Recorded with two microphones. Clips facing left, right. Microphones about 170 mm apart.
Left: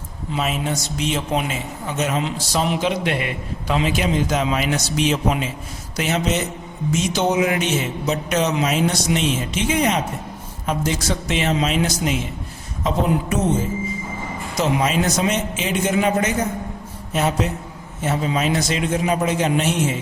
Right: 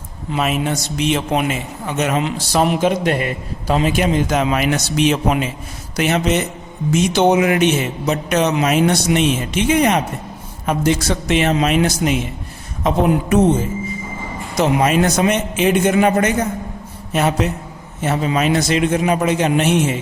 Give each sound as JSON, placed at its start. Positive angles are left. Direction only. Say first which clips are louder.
{"t": 0.3, "sound": "a man's voice", "louder": "right 4 dB", "side_deg": -65}
{"t": 14.6, "sound": "a man's voice", "louder": "right 5 dB", "side_deg": -60}